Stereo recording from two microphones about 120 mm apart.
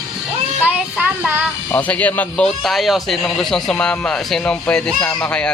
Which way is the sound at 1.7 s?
10° left (ahead or behind).